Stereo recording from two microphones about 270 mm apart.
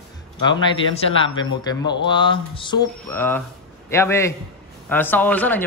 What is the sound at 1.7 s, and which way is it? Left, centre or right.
A man's voice, centre.